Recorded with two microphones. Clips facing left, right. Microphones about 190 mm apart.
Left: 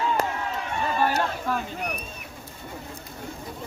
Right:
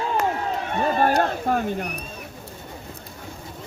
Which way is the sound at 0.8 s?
50° right (ahead or behind).